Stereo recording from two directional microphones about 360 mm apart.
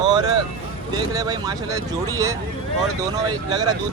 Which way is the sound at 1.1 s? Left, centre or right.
Centre.